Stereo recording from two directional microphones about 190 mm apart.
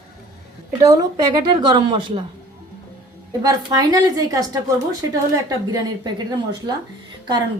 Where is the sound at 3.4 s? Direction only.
20° right (ahead or behind).